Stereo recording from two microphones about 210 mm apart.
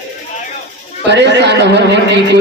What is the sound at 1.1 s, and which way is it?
Speech, 55° right (ahead or behind).